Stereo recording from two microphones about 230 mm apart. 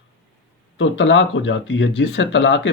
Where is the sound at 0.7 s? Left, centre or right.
Left.